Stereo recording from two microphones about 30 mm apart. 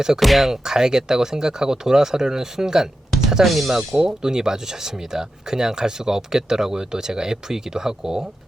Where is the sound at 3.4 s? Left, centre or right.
Centre.